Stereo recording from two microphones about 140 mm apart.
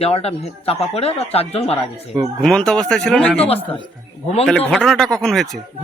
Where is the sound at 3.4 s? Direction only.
45° left (ahead or behind).